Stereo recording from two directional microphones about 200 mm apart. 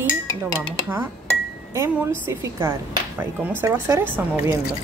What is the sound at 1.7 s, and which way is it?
Speech, 15° right (ahead or behind).